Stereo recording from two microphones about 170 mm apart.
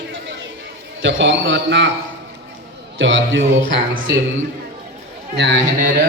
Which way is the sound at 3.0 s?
90° right.